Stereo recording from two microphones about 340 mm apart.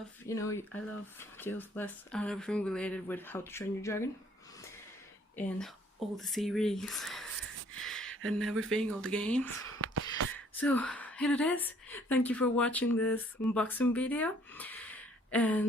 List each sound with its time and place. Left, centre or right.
0.3 s speech: centre
6.1 s speech: centre
7.8 s a sound: centre
8.3 s speech: centre
9.7 s a sound: right
10.3 s speech: centre